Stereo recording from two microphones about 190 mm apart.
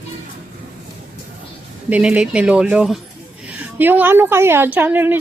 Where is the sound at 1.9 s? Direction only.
5° right (ahead or behind).